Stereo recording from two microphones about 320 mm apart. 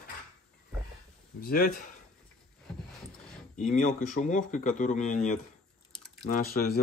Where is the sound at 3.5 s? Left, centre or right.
Left.